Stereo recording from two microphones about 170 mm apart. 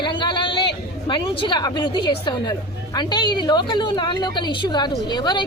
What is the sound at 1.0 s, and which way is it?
A woman's voice, 30° left (ahead or behind).